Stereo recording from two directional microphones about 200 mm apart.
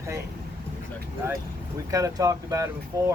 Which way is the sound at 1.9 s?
15° right (ahead or behind).